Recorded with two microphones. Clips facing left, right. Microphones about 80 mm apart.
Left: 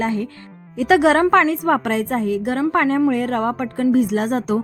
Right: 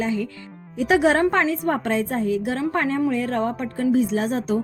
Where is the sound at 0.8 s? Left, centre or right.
Left.